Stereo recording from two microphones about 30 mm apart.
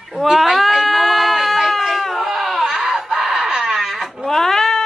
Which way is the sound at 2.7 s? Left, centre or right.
Centre.